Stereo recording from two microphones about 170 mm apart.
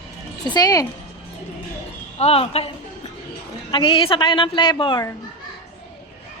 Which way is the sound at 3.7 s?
30° left (ahead or behind).